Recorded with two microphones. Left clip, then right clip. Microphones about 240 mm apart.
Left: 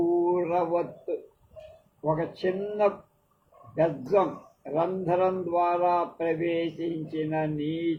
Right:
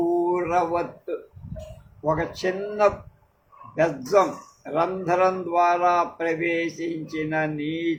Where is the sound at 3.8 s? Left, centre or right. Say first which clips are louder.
Right 4 dB; right.